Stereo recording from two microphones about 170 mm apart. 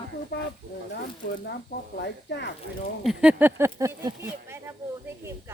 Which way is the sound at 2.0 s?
85° left.